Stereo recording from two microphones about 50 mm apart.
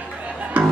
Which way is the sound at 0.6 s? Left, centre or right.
Right.